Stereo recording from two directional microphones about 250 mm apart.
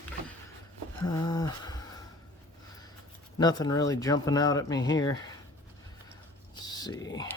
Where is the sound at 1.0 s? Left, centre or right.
Centre.